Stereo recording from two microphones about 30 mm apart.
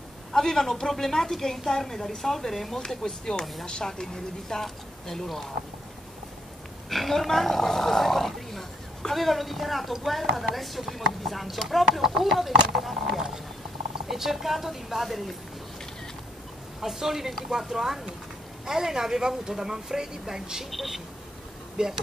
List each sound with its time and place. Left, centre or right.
0.4 s speech: centre
6.9 s a woman's voice: centre
14.0 s a woman's voice: centre
16.8 s a woman's voice: centre
20.7 s a woman's voice: centre
21.8 s speech: right